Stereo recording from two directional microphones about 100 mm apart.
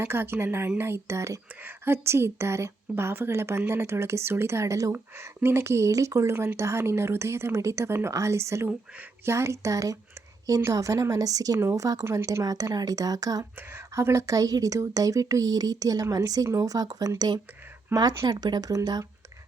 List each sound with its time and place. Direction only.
0.0 s a woman's voice: 25° right (ahead or behind); by 13.4 s 40° right (ahead or behind)
13.6 s a woman's voice: 20° right (ahead or behind); by 19.0 s 40° right (ahead or behind)